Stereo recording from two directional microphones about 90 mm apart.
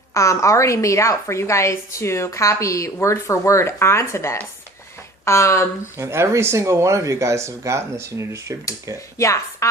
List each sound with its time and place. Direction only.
0.1 s a woman's voice: 35° left (ahead or behind)
6.0 s speech: 30° right (ahead or behind)
9.1 s a woman's voice: 35° left (ahead or behind)